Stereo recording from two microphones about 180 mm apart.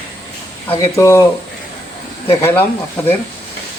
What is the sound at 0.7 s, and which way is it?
Speech, 15° left (ahead or behind).